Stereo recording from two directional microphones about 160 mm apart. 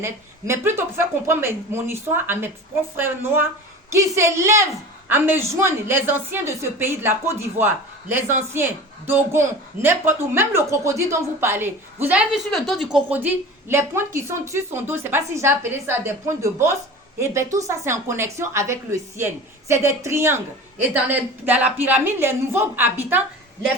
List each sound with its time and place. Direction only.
0.0 s a woman's voice: 15° right (ahead or behind)
12.5 s a woman's voice: centre (ahead or behind)